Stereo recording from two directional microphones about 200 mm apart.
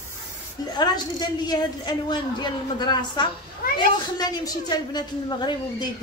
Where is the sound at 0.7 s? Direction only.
20° left (ahead or behind).